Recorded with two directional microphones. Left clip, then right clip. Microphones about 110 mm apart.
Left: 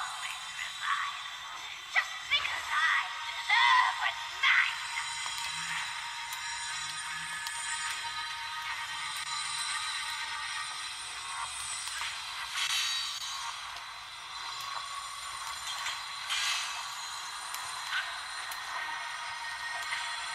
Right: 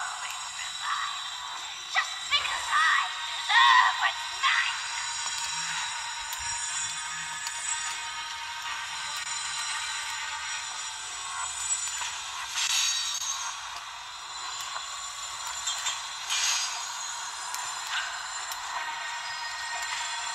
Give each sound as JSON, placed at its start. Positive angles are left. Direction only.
{"t": 2.0, "sound": "music", "side_deg": 15}
{"t": 4.6, "sound": "music", "side_deg": -50}
{"t": 12.5, "sound": "a sound", "side_deg": -40}